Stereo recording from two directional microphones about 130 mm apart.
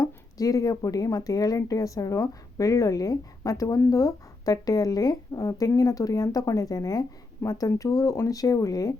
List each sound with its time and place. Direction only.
0.0 s speech: 25° left (ahead or behind)